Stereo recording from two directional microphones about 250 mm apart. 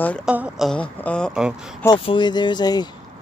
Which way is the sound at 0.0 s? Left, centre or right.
Centre.